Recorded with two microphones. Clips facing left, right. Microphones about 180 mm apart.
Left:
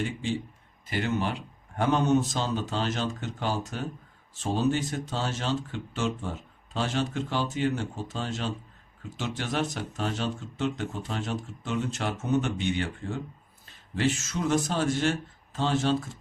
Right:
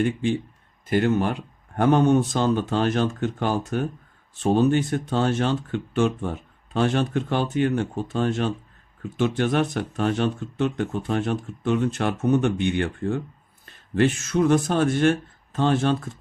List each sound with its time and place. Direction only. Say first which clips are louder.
0.0 s speech: right 7 dB; 60° right (ahead or behind)